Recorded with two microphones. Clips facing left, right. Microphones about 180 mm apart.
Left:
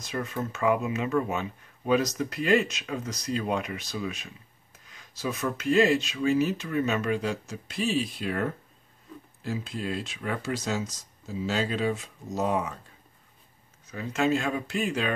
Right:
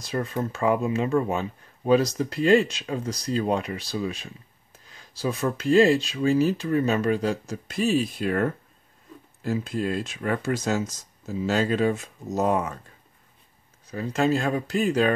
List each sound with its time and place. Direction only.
0.0 s speech: 35° right (ahead or behind)
13.8 s speech: 35° right (ahead or behind)